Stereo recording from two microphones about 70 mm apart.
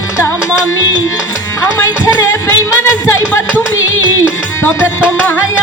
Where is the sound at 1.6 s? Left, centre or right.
Left.